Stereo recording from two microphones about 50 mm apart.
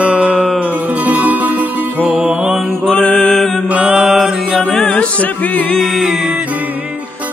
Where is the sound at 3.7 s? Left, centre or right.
Right.